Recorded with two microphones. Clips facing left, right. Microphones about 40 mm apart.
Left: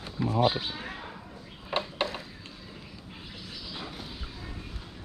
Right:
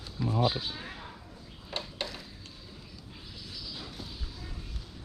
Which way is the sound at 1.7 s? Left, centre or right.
Left.